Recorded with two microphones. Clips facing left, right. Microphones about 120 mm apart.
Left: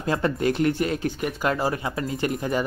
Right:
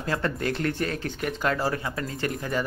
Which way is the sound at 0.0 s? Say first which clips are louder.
Left 4 dB; 20° left (ahead or behind).